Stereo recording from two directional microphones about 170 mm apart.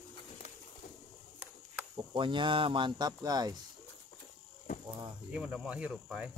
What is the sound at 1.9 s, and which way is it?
Speech, 30° right (ahead or behind).